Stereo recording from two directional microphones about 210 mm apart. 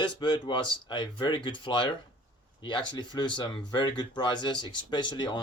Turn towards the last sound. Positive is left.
turn(degrees=20)  # may be behind; listen again after turning